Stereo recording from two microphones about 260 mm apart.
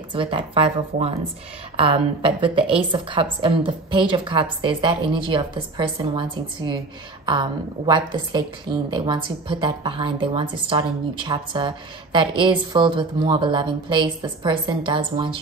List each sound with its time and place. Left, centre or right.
0.1 s a woman's voice: centre